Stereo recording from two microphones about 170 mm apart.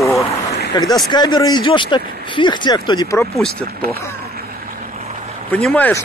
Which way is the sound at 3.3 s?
5° left (ahead or behind).